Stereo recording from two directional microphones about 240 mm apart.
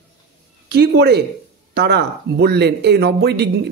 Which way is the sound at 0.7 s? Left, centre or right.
Right.